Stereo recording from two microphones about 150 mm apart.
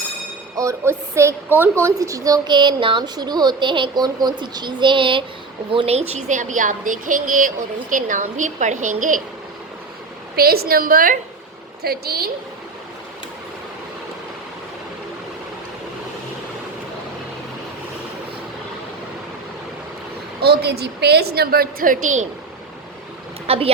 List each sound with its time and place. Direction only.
0.5 s a woman's voice: 20° right (ahead or behind); by 9.2 s 60° right (ahead or behind)
10.3 s a woman's voice: 90° right; by 11.2 s 70° right (ahead or behind)
11.8 s a woman's voice: 90° right
20.4 s a woman's voice: 90° right; by 22.3 s 55° right (ahead or behind)
23.5 s speech: 40° right (ahead or behind)